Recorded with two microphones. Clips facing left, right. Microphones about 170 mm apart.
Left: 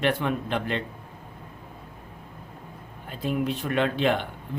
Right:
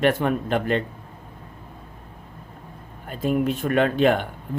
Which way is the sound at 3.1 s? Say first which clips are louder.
Right 5 dB; 45° right (ahead or behind).